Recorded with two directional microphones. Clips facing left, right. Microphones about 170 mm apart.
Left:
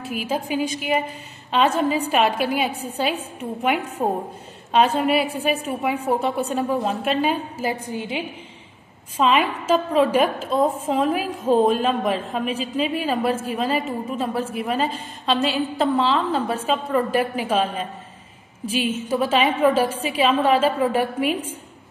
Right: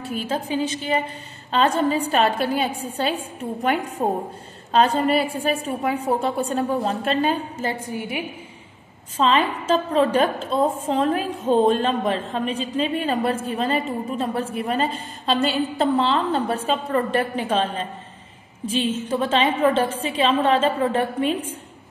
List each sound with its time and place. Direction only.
0.0 s a woman's voice: 5° left (ahead or behind)
7.8 s a woman's voice: 20° left (ahead or behind)
9.1 s a woman's voice: 10° left (ahead or behind)